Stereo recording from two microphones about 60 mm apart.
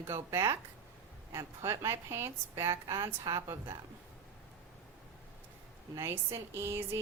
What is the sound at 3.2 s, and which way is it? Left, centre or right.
Speech, right.